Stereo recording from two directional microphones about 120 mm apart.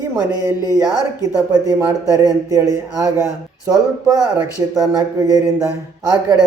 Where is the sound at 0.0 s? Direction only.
30° right (ahead or behind).